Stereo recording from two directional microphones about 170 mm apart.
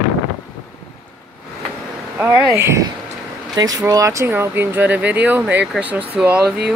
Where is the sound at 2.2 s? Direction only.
15° right (ahead or behind).